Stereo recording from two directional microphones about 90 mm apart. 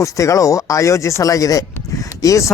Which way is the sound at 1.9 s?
40° left (ahead or behind).